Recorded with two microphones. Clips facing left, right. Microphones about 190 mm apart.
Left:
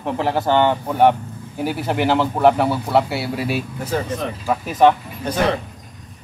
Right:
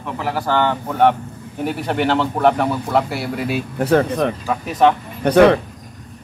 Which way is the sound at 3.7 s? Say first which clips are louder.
Right 7 dB; 65° right (ahead or behind).